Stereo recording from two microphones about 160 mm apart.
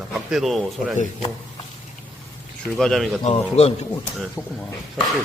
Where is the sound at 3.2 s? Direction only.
40° left (ahead or behind).